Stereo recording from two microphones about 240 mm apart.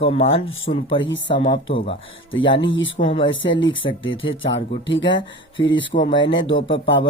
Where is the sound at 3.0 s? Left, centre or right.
Left.